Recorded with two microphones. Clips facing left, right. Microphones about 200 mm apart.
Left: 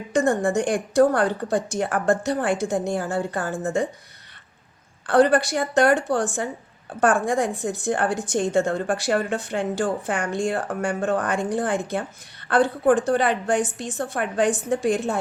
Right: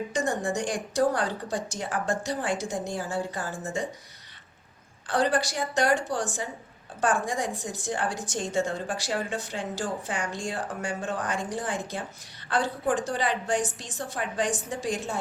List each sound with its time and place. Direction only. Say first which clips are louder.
0.1 s a woman's voice: left 11 dB; 55° left (ahead or behind)
5.0 s a woman's voice: left 8 dB; 60° left (ahead or behind)